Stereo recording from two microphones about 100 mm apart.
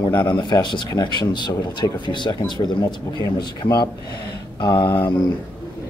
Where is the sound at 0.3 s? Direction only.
50° left (ahead or behind).